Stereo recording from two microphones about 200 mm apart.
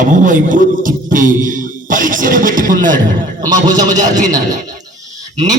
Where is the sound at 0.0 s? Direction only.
40° right (ahead or behind).